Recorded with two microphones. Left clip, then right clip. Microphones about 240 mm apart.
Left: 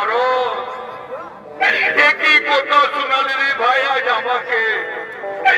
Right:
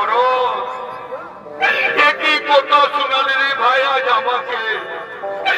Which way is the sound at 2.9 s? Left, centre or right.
Centre.